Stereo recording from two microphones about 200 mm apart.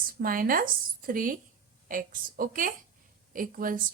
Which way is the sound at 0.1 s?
45° right (ahead or behind).